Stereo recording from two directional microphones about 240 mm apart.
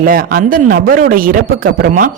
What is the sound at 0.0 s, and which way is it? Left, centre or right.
A woman's voice, right.